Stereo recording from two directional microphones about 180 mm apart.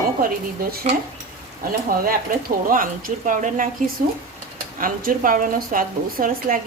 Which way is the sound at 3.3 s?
45° right (ahead or behind).